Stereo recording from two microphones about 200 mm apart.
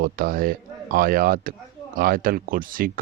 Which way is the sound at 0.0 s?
45° right (ahead or behind).